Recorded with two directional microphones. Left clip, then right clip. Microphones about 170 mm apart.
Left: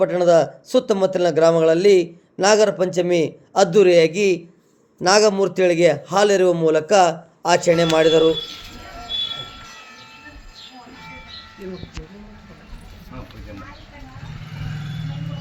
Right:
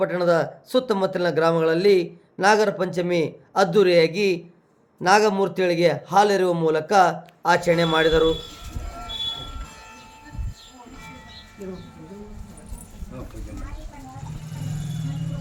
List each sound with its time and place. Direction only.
0.0 s a man's voice: 20° left (ahead or behind)